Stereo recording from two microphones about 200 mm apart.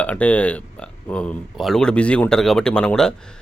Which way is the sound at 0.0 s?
5° left (ahead or behind).